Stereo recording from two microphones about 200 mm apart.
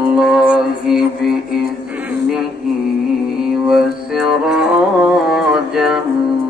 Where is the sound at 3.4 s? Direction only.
Centre (ahead or behind).